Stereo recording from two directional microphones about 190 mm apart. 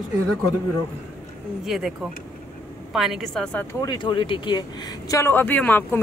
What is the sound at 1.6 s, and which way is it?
Speech, centre (ahead or behind).